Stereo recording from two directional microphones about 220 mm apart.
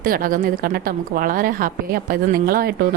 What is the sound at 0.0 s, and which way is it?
A woman's voice, 40° right (ahead or behind).